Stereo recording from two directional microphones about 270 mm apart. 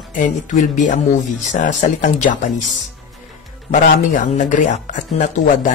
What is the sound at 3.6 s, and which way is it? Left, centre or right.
Speech, left.